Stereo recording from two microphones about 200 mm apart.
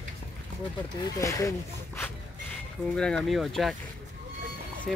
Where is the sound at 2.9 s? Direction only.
5° left (ahead or behind).